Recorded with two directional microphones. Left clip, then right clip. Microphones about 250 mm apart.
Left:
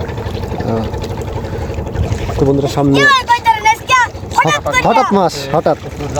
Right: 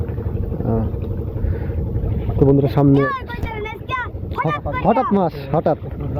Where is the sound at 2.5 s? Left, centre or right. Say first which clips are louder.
Left 2 dB; centre.